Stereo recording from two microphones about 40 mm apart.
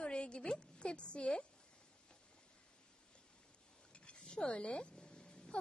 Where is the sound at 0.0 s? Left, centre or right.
Left.